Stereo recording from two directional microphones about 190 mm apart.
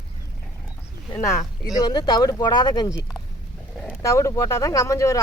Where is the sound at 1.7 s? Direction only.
20° left (ahead or behind).